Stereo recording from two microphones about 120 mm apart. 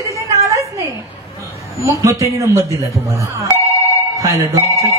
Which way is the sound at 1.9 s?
25° right (ahead or behind).